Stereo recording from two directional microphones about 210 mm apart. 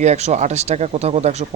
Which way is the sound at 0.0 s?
30° right (ahead or behind).